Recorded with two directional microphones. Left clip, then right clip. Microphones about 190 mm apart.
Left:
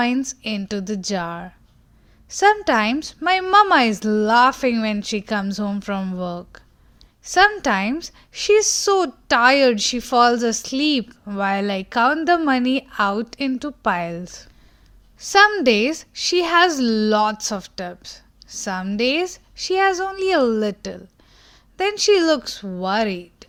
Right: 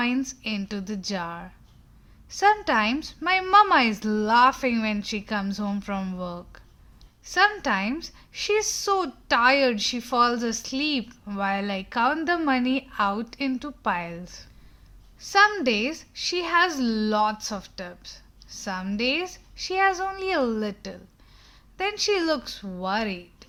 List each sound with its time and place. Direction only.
0.0 s a woman's voice: 30° left (ahead or behind)